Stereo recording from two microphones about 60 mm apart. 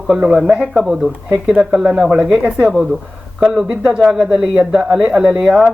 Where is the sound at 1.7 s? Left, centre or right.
Centre.